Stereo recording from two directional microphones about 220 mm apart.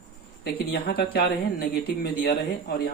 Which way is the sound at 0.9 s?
45° left (ahead or behind).